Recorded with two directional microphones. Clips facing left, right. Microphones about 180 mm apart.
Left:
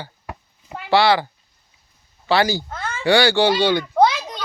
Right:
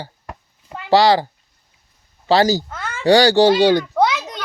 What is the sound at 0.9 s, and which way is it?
Speech, 40° right (ahead or behind).